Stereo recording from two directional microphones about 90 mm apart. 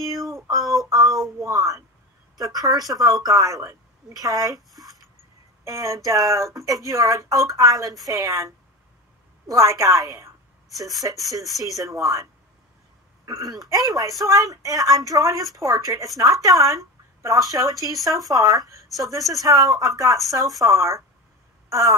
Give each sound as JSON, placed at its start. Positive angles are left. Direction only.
{"t": 0.5, "sound": "a woman's voice", "side_deg": -40}
{"t": 5.6, "sound": "a woman's voice", "side_deg": -40}
{"t": 21.6, "sound": "a sound", "side_deg": -40}